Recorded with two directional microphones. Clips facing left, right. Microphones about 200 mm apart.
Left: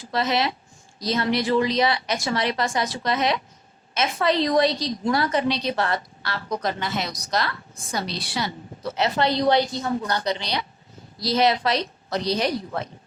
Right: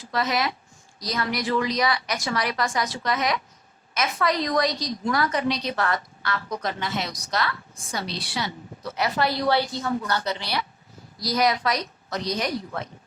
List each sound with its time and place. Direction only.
0.1 s a woman's voice: 25° left (ahead or behind)